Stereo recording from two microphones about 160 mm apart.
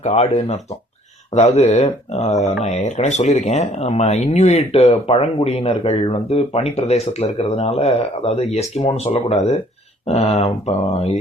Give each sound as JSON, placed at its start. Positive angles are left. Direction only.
{"t": 0.0, "sound": "speech", "side_deg": 40}